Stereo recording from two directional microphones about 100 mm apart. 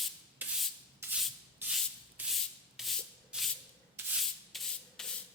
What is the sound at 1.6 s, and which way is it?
Rub, 20° right (ahead or behind).